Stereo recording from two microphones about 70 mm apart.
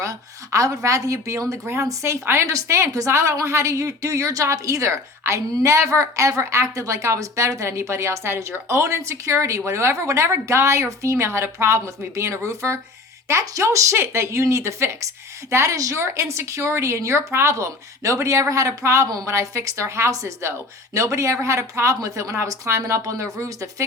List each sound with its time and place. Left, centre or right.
0.0 s a woman's voice: right